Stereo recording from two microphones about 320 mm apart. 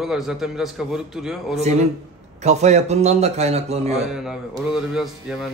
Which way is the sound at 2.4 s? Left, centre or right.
Right.